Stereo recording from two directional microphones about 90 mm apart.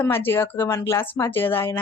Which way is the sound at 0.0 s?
25° left (ahead or behind).